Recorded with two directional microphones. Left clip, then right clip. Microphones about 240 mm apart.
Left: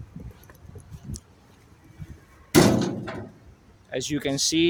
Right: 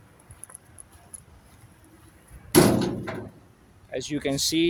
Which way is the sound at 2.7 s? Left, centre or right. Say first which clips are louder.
Even; centre.